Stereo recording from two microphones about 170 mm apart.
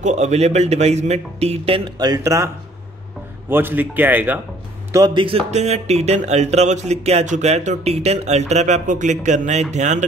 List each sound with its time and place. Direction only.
0.0 s speech: 40° right (ahead or behind); by 4.4 s 10° right (ahead or behind)
4.9 s speech: 25° right (ahead or behind); by 10.0 s 45° right (ahead or behind)